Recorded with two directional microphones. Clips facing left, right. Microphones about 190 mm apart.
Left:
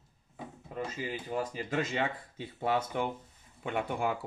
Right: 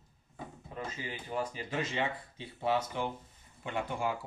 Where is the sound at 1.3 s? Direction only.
45° left (ahead or behind).